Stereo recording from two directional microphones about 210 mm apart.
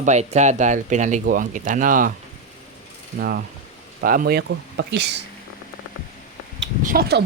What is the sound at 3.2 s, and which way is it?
Speech, 45° right (ahead or behind).